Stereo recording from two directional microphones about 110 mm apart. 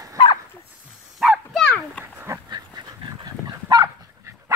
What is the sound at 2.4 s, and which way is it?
Dog, 40° right (ahead or behind).